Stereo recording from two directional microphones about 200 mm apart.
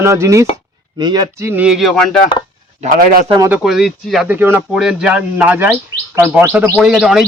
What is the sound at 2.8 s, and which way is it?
Speech, 35° right (ahead or behind).